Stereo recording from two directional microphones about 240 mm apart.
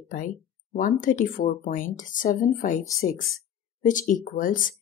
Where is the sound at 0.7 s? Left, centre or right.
Left.